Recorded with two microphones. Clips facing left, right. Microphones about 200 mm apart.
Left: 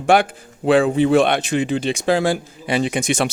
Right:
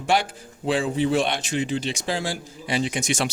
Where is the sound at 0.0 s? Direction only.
55° left (ahead or behind).